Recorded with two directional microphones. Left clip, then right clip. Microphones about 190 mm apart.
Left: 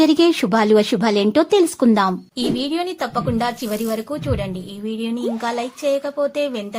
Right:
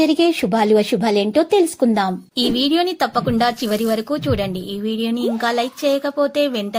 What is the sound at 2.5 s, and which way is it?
Speech, 25° right (ahead or behind).